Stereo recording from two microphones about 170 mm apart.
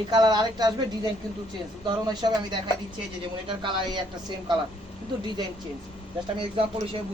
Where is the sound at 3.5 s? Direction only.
30° right (ahead or behind).